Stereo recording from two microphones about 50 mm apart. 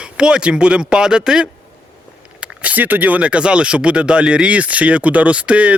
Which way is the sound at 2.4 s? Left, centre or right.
Right.